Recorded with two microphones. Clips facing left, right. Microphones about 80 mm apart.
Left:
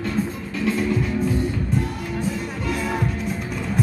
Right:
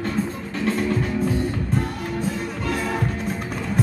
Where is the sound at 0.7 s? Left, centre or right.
Right.